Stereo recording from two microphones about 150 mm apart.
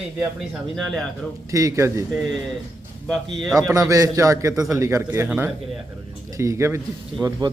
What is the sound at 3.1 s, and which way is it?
Speech, centre (ahead or behind).